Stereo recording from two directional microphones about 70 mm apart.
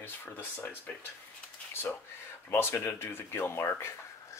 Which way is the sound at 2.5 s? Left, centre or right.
Left.